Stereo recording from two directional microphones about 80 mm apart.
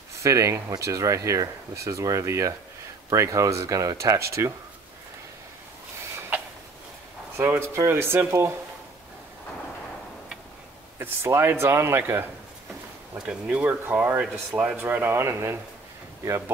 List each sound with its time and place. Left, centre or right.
0.2 s speech: right
7.3 s speech: right
11.0 s speech: right
13.2 s speech: centre
14.2 s speech: centre; by 16.5 s right